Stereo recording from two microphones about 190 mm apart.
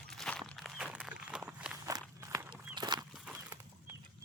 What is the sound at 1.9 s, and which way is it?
Walk, 15° right (ahead or behind).